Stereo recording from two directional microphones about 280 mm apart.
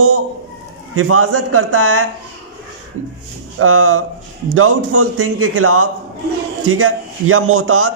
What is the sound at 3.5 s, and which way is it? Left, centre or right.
A man's voice, right.